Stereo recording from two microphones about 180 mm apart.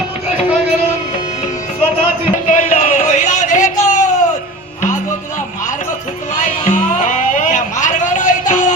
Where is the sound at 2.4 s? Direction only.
45° left (ahead or behind).